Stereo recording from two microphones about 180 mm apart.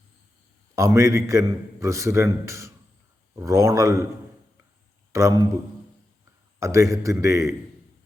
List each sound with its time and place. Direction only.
0.8 s a man's voice: 15° right (ahead or behind)
5.1 s a man's voice: 20° right (ahead or behind)
6.6 s a man's voice: 15° right (ahead or behind)